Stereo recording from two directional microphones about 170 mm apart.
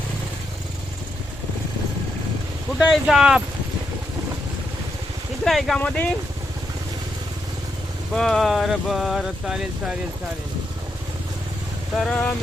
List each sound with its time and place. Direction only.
2.9 s speech: 5° right (ahead or behind)
5.5 s speech: centre (ahead or behind)
8.1 s speech: centre (ahead or behind)
11.9 s speech: 5° left (ahead or behind)